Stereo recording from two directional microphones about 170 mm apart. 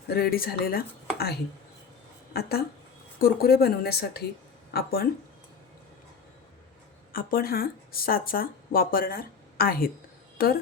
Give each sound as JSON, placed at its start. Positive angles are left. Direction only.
{"t": 0.1, "sound": "speech", "side_deg": 65}
{"t": 7.1, "sound": "speech", "side_deg": 55}